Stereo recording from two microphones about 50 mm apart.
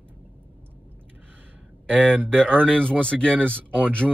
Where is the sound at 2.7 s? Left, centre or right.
Left.